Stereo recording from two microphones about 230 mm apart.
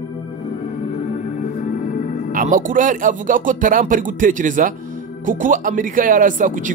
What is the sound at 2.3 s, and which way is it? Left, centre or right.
Speech, right.